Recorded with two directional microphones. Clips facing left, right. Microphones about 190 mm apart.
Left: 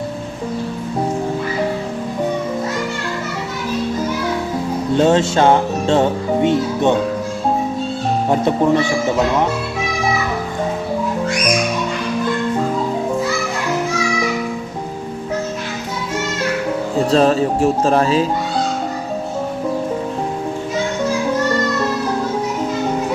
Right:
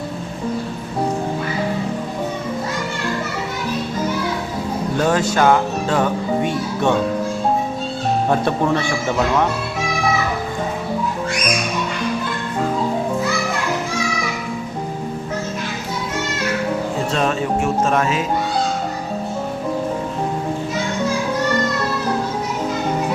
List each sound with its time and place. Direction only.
4.9 s speech: 25° left (ahead or behind)
8.3 s speech: 15° left (ahead or behind)
17.1 s speech: 35° left (ahead or behind)